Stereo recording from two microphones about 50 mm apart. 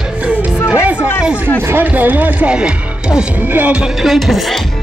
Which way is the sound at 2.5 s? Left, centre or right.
Centre.